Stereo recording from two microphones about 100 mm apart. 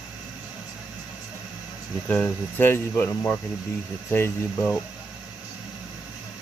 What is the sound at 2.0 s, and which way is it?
Speech, 15° left (ahead or behind).